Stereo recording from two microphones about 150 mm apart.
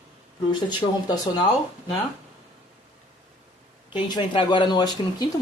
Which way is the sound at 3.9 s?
30° left (ahead or behind).